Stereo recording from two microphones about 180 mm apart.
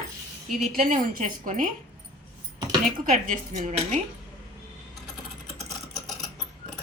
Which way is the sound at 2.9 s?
45° right (ahead or behind).